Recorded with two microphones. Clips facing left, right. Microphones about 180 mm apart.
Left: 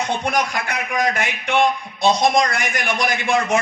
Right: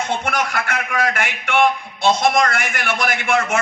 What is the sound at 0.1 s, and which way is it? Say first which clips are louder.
A man's voice: left 1 dB; 15° left (ahead or behind).